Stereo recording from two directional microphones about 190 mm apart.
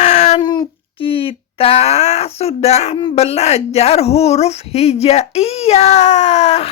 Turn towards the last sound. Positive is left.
turn(degrees=35)  # may be behind; listen again after turning